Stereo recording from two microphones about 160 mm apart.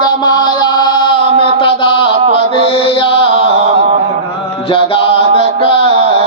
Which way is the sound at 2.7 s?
35° left (ahead or behind).